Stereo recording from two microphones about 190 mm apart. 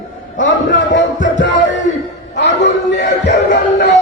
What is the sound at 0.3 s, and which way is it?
Music, 70° left (ahead or behind).